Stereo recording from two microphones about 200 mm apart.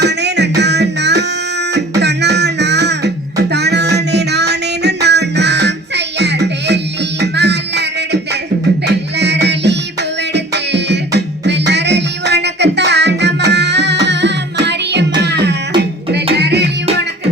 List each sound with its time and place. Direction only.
0.0 s music: 60° right (ahead or behind)
6.1 s a sound: 60° right (ahead or behind)
7.2 s music: 60° right (ahead or behind)